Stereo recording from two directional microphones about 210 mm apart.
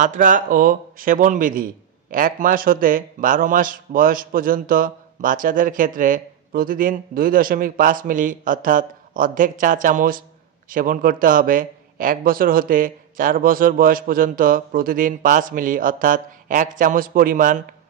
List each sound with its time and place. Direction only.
0.0 s speech: 40° right (ahead or behind)